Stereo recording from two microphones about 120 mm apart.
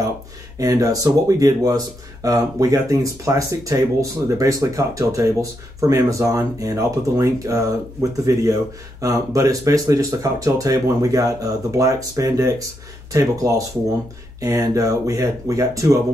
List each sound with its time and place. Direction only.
0.6 s speech: 30° right (ahead or behind)